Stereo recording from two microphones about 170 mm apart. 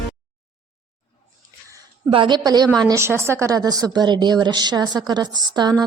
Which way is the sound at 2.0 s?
30° right (ahead or behind).